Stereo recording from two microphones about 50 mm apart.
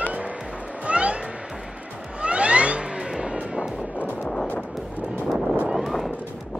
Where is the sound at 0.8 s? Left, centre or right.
Right.